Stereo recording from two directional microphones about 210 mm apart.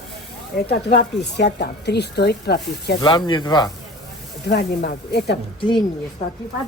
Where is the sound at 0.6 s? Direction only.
50° left (ahead or behind).